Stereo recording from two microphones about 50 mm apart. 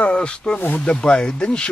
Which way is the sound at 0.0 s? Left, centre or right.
Centre.